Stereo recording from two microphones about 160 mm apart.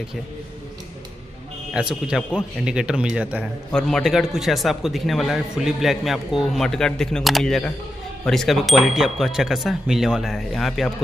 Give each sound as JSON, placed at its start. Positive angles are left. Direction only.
{"t": 1.7, "sound": "a man's voice", "side_deg": -5}
{"t": 3.7, "sound": "a man's voice", "side_deg": 5}